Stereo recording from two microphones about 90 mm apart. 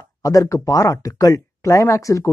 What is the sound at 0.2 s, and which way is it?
Speech, 40° left (ahead or behind).